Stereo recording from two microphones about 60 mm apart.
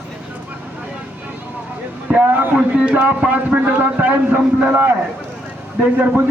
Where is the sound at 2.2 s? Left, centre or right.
Right.